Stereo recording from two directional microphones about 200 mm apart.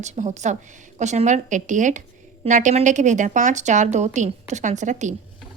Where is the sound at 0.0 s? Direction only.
35° right (ahead or behind).